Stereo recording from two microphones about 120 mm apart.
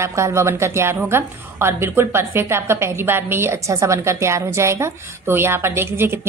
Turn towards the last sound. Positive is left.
turn(degrees=-20)  # may be behind; listen again after turning